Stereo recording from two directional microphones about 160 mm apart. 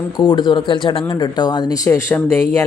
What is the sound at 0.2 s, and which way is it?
Speech, 30° left (ahead or behind).